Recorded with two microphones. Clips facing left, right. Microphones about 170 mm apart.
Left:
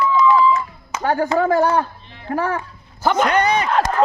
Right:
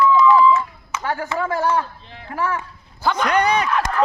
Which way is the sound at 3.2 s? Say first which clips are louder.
Left 1 dB; 60° left (ahead or behind).